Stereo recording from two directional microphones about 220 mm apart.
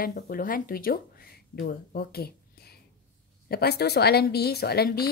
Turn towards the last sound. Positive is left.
turn(degrees=45)  # may be behind; listen again after turning